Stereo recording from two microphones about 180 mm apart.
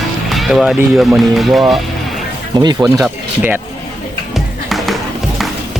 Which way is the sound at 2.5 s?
25° right (ahead or behind).